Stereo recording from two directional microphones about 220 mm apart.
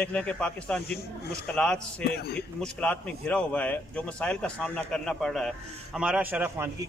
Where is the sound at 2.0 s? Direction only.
45° left (ahead or behind).